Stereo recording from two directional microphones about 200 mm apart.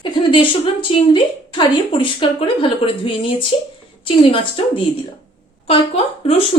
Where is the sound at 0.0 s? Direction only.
25° left (ahead or behind).